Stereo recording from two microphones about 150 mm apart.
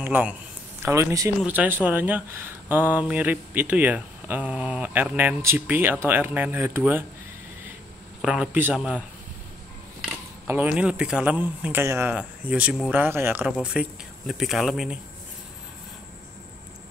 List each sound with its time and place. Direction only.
0.0 s a man's voice: 10° right (ahead or behind)
8.2 s speech: 5° right (ahead or behind)
10.4 s speech: 15° right (ahead or behind)
13.0 s speech: 15° right (ahead or behind)
13.5 s speech: 5° right (ahead or behind)